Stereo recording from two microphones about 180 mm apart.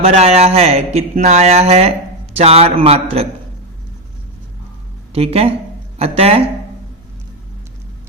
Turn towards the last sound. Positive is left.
turn(degrees=-35)  # may be behind; listen again after turning